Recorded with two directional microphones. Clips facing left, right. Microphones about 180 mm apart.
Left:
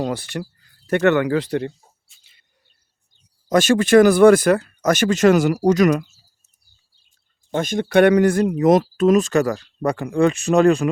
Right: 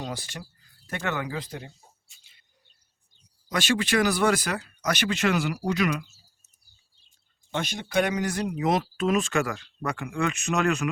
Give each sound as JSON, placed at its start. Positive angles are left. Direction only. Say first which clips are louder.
{"t": 0.0, "sound": "speech", "louder": "left 11 dB", "side_deg": 60}
{"t": 3.5, "sound": "speech", "louder": "left 12 dB", "side_deg": 45}
{"t": 7.5, "sound": "speech", "louder": "left 9 dB", "side_deg": 50}